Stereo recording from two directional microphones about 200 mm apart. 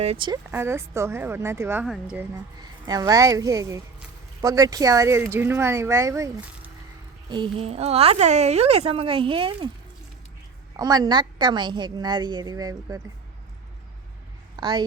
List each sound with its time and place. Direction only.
0.0 s speech: 30° right (ahead or behind)
0.5 s speech: 15° right (ahead or behind)
2.6 s speech: 20° right (ahead or behind)
10.8 s speech: 20° right (ahead or behind)
14.5 s speech: 20° right (ahead or behind)